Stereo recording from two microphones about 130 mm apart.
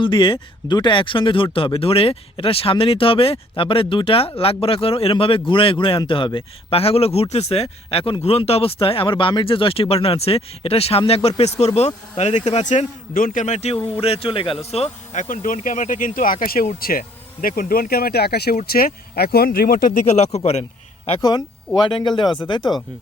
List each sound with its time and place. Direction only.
0.0 s a man's voice: 40° left (ahead or behind); by 13.7 s 60° left (ahead or behind)
13.7 s speech: 15° left (ahead or behind)
14.0 s a man's voice: 45° left (ahead or behind)
21.2 s speech: 30° left (ahead or behind)